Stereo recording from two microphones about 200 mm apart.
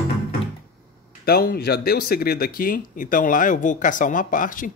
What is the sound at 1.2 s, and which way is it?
Speech, 50° left (ahead or behind).